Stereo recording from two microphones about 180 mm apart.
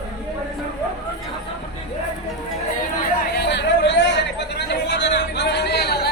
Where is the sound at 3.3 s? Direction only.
65° left (ahead or behind).